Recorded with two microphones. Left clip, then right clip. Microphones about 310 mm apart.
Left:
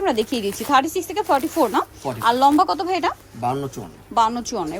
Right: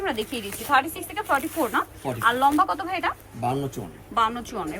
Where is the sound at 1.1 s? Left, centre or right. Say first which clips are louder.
Left 5 dB; centre.